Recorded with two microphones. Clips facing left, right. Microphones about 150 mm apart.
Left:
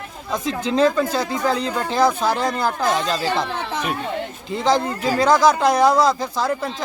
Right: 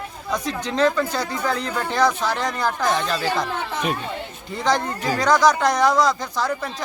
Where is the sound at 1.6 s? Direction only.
25° left (ahead or behind).